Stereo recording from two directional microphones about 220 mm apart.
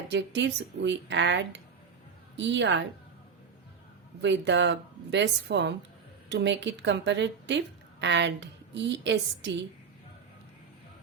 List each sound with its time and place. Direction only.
0.1 s a woman's voice: 55° right (ahead or behind)
4.2 s a woman's voice: 55° right (ahead or behind)